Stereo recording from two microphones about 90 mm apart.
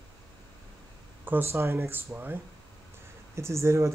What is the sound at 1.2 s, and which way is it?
Speech, 25° right (ahead or behind).